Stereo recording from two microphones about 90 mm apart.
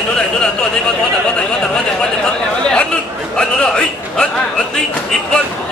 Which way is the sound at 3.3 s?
10° left (ahead or behind).